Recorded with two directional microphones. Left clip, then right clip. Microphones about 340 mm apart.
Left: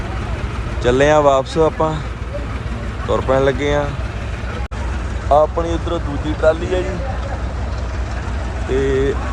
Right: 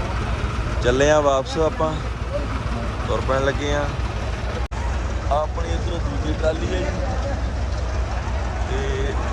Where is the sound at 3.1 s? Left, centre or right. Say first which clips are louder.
Left 6 dB; centre.